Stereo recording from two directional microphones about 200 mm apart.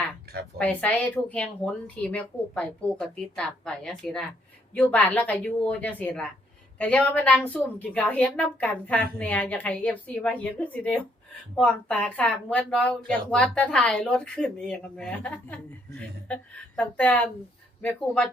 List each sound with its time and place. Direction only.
0.6 s a woman's voice: 5° left (ahead or behind)